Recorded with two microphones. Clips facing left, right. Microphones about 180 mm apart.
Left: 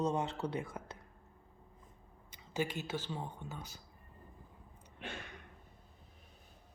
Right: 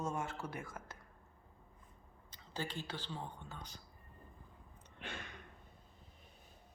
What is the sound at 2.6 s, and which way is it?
Speech, 10° left (ahead or behind).